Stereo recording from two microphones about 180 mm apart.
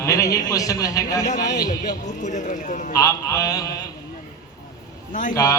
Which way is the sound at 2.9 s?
20° left (ahead or behind).